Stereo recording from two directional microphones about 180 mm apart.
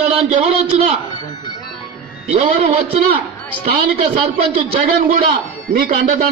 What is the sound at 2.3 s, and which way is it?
Speech, 35° right (ahead or behind).